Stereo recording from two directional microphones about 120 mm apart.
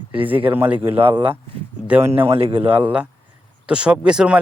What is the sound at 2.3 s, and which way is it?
Speech, 50° right (ahead or behind).